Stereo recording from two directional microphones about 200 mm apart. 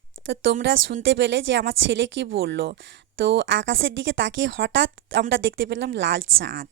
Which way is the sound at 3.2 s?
65° right (ahead or behind).